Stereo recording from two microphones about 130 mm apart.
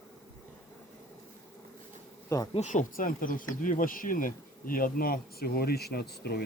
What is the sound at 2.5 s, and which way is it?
Speech, 70° left (ahead or behind).